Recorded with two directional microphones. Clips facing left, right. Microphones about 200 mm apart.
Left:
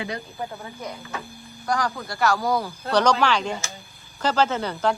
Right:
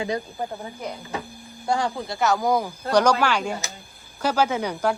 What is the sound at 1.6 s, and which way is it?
Speech, 25° right (ahead or behind).